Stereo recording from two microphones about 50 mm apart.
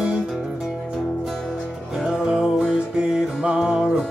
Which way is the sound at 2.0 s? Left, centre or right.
Centre.